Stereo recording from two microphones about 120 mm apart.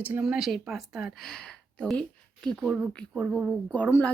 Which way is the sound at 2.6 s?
10° right (ahead or behind).